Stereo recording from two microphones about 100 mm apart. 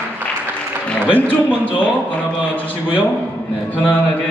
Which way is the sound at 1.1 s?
15° left (ahead or behind).